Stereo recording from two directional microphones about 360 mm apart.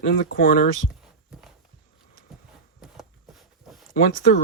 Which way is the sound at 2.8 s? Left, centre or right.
Centre.